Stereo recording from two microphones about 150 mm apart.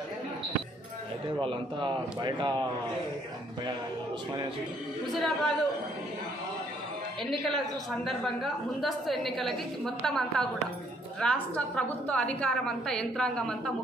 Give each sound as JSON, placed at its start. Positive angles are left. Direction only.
{"t": 1.4, "sound": "a man's voice", "side_deg": -35}
{"t": 5.1, "sound": "a woman's voice", "side_deg": 0}
{"t": 7.2, "sound": "a woman's voice", "side_deg": 0}